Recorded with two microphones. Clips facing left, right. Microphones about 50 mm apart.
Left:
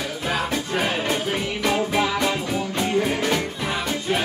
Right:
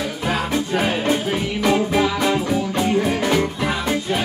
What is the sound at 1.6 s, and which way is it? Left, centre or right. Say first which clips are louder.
Music: right 5 dB; centre.